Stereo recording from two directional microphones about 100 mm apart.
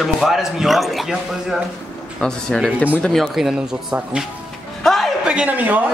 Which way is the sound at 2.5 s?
10° left (ahead or behind).